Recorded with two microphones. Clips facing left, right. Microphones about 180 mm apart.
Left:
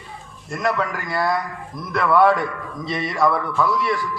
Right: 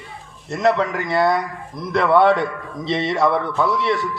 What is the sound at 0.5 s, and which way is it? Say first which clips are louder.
A man's voice: right 5 dB; 25° right (ahead or behind).